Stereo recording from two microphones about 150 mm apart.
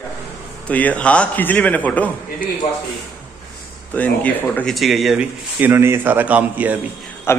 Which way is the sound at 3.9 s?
10° left (ahead or behind).